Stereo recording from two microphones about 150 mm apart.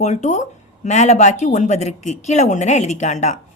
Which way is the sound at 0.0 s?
50° left (ahead or behind).